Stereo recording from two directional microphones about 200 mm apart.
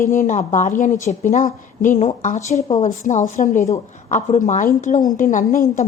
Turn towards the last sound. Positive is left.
turn(degrees=45)  # may be behind; listen again after turning